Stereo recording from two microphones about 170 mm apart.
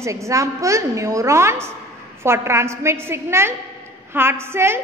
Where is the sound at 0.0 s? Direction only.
20° right (ahead or behind).